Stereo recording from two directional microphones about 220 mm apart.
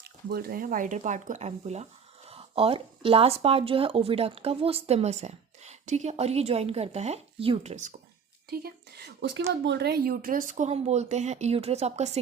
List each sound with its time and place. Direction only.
0.0 s speech: 45° right (ahead or behind)
8.4 s speech: 45° right (ahead or behind)